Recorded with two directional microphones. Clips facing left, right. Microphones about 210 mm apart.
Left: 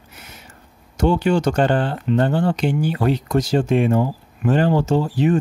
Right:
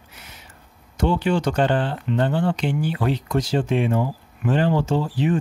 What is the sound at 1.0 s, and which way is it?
Speech, 45° left (ahead or behind).